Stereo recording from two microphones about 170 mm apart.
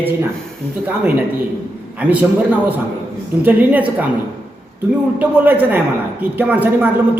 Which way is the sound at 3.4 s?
10° right (ahead or behind).